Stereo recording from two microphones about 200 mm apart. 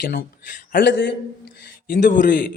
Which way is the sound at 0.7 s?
60° left (ahead or behind).